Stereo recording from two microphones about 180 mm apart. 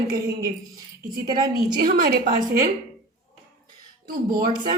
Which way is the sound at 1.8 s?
55° right (ahead or behind).